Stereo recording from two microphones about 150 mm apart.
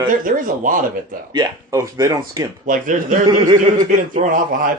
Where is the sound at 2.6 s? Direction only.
60° right (ahead or behind).